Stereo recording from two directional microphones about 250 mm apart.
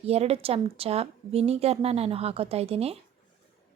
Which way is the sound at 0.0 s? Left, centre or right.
Right.